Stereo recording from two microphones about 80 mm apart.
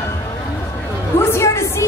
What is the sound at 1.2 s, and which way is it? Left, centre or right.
Music, left.